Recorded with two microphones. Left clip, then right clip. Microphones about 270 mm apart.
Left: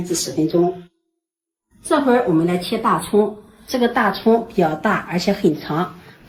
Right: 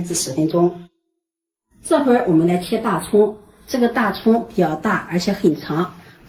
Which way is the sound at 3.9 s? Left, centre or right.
Left.